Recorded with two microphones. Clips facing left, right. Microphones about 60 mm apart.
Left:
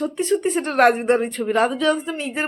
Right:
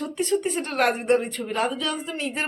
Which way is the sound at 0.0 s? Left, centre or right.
Left.